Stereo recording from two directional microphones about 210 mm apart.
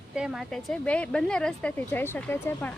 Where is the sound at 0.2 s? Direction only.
5° right (ahead or behind).